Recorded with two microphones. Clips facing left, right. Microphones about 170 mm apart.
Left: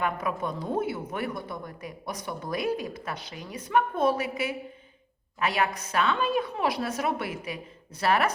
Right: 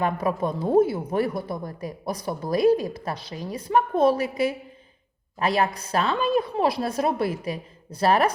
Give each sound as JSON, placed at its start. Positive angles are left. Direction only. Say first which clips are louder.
{"t": 0.0, "sound": "speech", "louder": "right 5 dB", "side_deg": -35}